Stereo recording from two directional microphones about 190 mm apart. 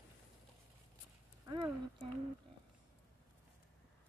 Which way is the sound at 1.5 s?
20° right (ahead or behind).